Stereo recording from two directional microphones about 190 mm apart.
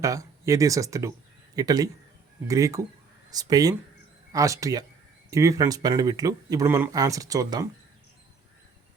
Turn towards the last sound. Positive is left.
turn(degrees=-20)  # may be behind; listen again after turning